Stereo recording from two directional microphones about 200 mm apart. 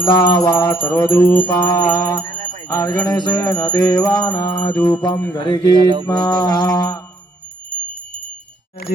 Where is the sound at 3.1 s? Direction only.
20° left (ahead or behind).